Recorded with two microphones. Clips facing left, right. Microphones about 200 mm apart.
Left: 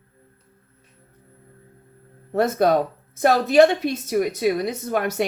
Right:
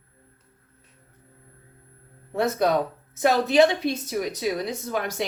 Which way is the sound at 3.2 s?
45° left (ahead or behind).